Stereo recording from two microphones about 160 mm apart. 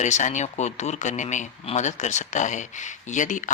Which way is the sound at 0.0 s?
50° left (ahead or behind).